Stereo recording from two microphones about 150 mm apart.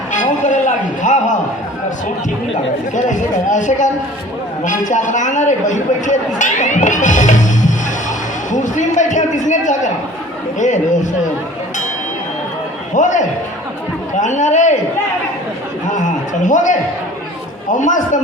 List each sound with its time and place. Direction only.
0.1 s a sound: 55° left (ahead or behind)
2.9 s a man's voice: 55° left (ahead or behind)
12.9 s a man's voice: 55° left (ahead or behind)
15.9 s a man's voice: 60° left (ahead or behind)